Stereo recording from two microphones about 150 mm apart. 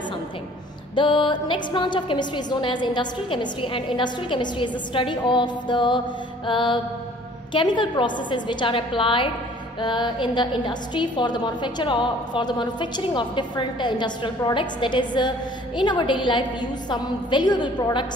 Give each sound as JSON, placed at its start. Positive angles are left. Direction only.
{"t": 0.9, "sound": "a woman's voice", "side_deg": 30}